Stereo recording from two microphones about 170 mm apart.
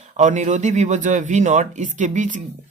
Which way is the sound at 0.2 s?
45° right (ahead or behind).